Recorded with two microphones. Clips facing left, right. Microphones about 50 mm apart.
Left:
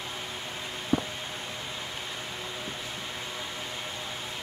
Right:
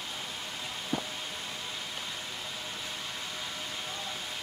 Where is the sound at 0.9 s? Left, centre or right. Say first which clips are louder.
Left 7 dB; left.